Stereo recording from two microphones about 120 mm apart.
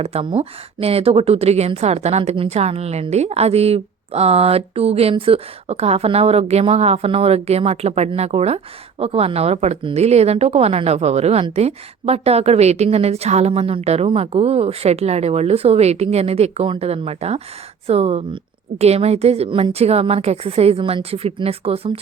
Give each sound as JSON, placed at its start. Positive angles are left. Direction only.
{"t": 0.0, "sound": "a woman's voice", "side_deg": -60}